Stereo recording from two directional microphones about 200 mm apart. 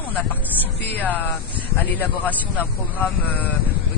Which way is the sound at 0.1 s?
10° left (ahead or behind).